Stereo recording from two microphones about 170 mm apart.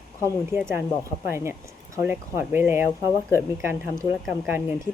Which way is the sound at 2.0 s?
15° right (ahead or behind).